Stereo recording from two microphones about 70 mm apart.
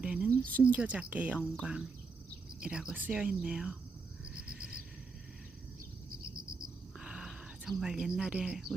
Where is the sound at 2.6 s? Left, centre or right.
Centre.